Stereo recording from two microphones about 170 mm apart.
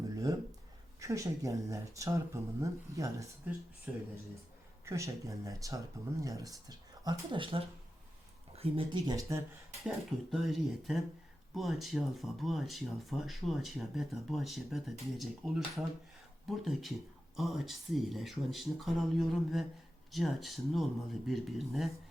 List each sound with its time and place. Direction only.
0.9 s speech: 20° right (ahead or behind)
10.3 s speech: centre (ahead or behind)